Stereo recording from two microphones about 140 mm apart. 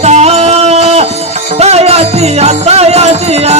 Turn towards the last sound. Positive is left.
turn(degrees=-50)  # may be behind; listen again after turning